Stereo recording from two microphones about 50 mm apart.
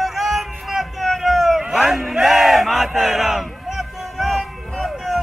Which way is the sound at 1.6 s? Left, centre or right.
Centre.